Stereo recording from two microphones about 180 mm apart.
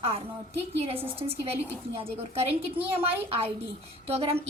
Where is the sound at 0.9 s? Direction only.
10° right (ahead or behind).